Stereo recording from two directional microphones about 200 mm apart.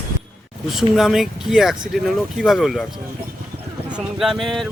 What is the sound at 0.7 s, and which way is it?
Speech, centre (ahead or behind).